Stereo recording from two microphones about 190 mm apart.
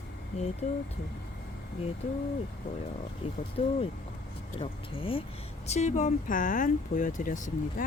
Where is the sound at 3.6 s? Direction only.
30° left (ahead or behind).